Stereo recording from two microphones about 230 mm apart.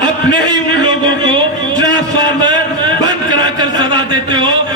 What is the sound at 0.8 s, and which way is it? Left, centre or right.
A man's voice, centre.